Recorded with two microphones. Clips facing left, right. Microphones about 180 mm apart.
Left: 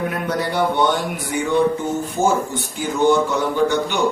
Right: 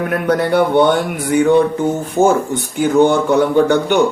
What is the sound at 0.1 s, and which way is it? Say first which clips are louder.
Speech: right 8 dB; 60° right (ahead or behind).